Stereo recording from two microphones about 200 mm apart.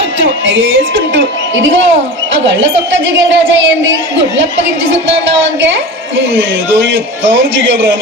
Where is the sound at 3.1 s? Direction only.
65° right (ahead or behind).